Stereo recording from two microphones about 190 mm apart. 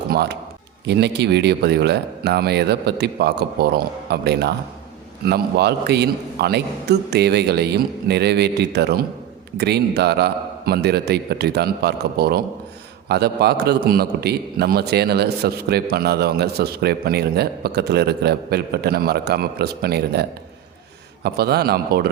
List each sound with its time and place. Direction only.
0.1 s a man's voice: 55° right (ahead or behind)
21.2 s a man's voice: 55° right (ahead or behind)